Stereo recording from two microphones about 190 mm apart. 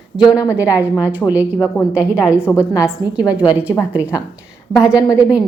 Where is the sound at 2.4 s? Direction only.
10° left (ahead or behind).